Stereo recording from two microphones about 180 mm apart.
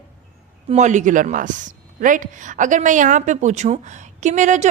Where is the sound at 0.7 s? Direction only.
40° right (ahead or behind).